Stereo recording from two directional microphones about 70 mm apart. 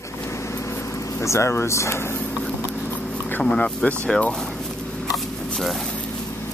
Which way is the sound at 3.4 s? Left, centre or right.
Centre.